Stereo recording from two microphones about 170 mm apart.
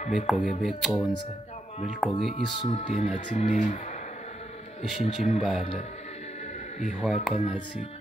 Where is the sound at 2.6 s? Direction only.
40° left (ahead or behind).